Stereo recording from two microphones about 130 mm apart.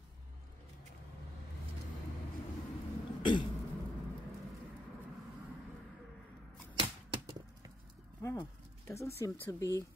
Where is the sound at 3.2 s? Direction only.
35° left (ahead or behind).